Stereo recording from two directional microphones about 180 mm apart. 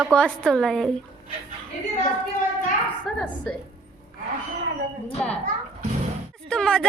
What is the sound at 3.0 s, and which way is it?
Speech, 5° left (ahead or behind).